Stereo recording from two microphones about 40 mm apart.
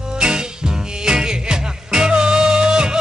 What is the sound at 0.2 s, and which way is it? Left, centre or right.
Music, centre.